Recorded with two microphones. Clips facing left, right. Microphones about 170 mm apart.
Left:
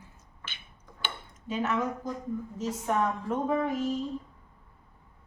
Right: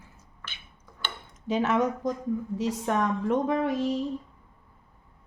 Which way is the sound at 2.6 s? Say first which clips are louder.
Even; 80° right.